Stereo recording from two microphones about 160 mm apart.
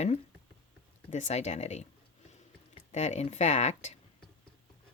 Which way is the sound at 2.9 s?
45° left (ahead or behind).